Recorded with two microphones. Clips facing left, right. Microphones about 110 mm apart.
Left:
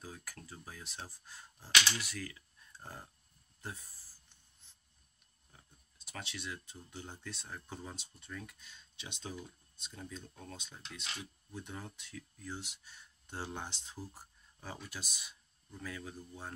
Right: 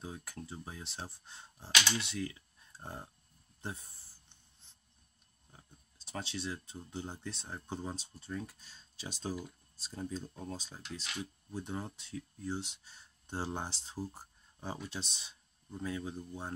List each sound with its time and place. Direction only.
0.0 s speech: 25° right (ahead or behind)
3.6 s a sound: 30° right (ahead or behind)
5.5 s speech: 30° right (ahead or behind)